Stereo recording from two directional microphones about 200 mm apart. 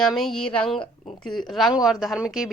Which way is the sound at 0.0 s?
Centre (ahead or behind).